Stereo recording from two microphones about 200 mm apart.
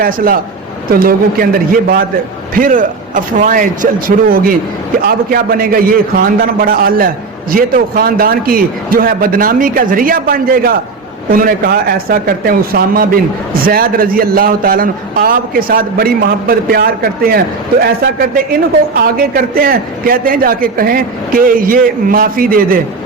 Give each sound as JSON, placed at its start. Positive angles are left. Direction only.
{"t": 0.9, "sound": "a man's voice", "side_deg": -45}
{"t": 18.9, "sound": "a man's voice", "side_deg": -50}